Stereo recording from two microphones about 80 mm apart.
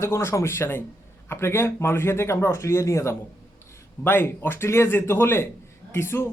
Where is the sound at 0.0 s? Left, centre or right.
Left.